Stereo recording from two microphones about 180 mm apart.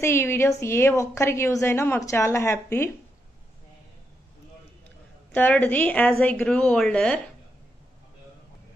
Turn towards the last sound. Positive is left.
turn(degrees=5)  # may be behind; listen again after turning